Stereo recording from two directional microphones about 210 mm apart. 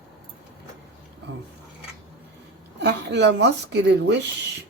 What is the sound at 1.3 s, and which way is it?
Speech, 55° right (ahead or behind).